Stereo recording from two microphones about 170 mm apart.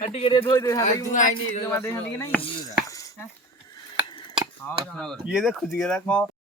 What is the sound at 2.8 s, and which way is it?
Dishes, 20° left (ahead or behind).